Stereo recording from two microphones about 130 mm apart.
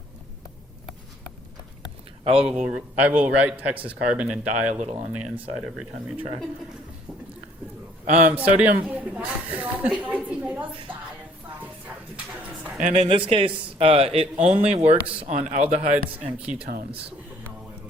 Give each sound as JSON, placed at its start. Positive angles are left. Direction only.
{"t": 2.2, "sound": "speech", "side_deg": -50}
{"t": 2.6, "sound": "speech", "side_deg": -10}
{"t": 8.3, "sound": "speech", "side_deg": -10}
{"t": 11.6, "sound": "a sound", "side_deg": -10}
{"t": 12.8, "sound": "speech", "side_deg": -50}
{"t": 14.9, "sound": "speech", "side_deg": -10}
{"t": 15.2, "sound": "speech", "side_deg": -55}
{"t": 16.0, "sound": "speech", "side_deg": -10}